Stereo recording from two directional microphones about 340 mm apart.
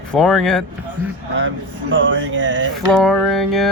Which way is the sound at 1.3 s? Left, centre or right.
Right.